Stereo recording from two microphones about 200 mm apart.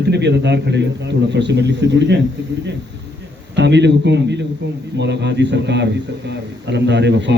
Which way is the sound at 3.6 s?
60° right (ahead or behind).